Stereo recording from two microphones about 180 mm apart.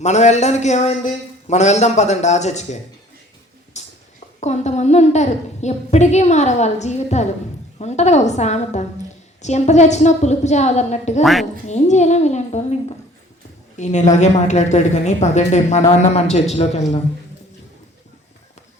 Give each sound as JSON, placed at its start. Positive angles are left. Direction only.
{"t": 0.0, "sound": "a woman's voice", "side_deg": 40}
{"t": 3.8, "sound": "a sound", "side_deg": 40}
{"t": 4.4, "sound": "a woman's voice", "side_deg": 40}
{"t": 11.2, "sound": "speech", "side_deg": 0}
{"t": 11.6, "sound": "a woman's voice", "side_deg": 40}
{"t": 13.7, "sound": "a woman's voice", "side_deg": 40}